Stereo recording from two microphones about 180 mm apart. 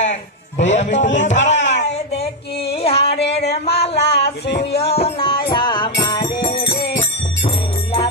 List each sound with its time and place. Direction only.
0.0 s music: 40° left (ahead or behind)
1.0 s speech: 40° left (ahead or behind)
2.7 s a sound: 35° left (ahead or behind)
3.2 s music: 70° left (ahead or behind)
3.6 s a sound: 35° left (ahead or behind)
4.0 s music: 65° left (ahead or behind)
4.9 s music: 30° left (ahead or behind)
7.0 s jingle bell: 30° left (ahead or behind)